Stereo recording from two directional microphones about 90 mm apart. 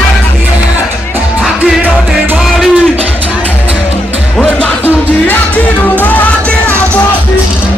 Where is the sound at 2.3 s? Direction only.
5° right (ahead or behind).